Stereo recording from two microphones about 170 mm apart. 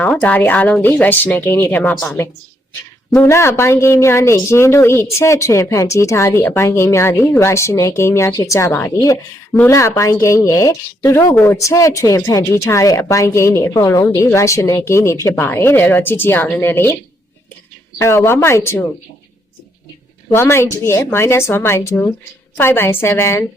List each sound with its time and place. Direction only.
0.0 s speech: 10° left (ahead or behind)
3.1 s speech: 15° left (ahead or behind)
18.0 s speech: 15° left (ahead or behind)
20.3 s speech: 15° left (ahead or behind)